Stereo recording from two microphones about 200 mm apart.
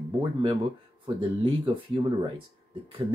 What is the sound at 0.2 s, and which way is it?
Speech, 25° right (ahead or behind).